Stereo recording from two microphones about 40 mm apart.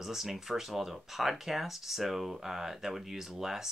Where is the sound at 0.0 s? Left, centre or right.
Centre.